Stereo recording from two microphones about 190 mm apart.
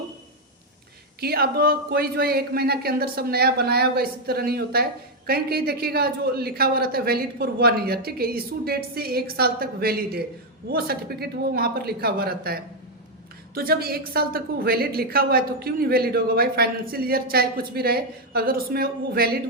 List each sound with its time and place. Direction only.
1.2 s a man's voice: 55° right (ahead or behind)